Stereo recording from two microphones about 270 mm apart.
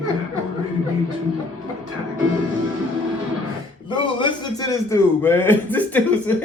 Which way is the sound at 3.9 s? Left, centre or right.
Centre.